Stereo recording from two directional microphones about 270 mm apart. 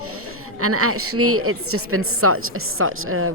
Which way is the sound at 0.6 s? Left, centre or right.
Right.